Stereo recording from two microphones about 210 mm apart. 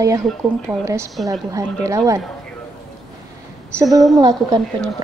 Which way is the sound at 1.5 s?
15° right (ahead or behind).